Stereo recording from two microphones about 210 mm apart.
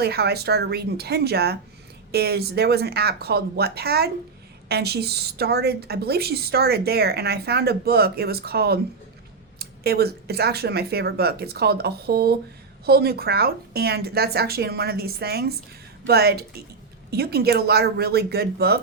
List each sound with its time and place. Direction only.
0.0 s a woman's voice: 50° right (ahead or behind)